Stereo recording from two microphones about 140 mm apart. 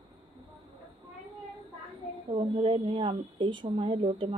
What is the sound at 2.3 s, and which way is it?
A woman's voice, 40° right (ahead or behind).